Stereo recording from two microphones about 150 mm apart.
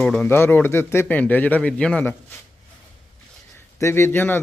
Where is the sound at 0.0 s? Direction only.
5° left (ahead or behind).